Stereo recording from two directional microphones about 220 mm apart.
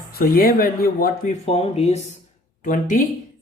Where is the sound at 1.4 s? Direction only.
25° left (ahead or behind).